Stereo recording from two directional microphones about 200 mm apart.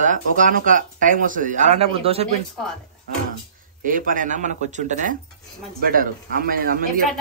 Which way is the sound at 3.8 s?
45° right (ahead or behind).